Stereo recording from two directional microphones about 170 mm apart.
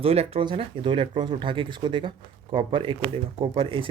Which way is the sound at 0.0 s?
35° right (ahead or behind).